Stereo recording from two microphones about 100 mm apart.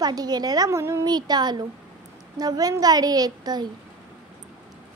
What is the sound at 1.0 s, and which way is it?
Speech, 45° right (ahead or behind).